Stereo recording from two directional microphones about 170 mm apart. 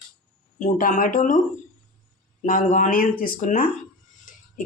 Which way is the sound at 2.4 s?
50° left (ahead or behind).